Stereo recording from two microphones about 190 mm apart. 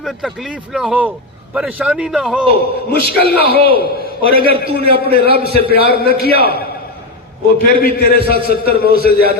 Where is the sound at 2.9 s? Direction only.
55° left (ahead or behind).